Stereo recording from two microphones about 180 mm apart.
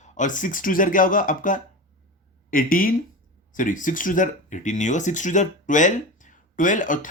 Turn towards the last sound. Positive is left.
turn(degrees=45)  # may be behind; listen again after turning